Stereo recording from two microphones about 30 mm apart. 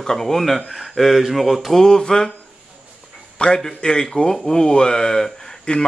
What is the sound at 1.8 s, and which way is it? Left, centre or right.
Speech, left.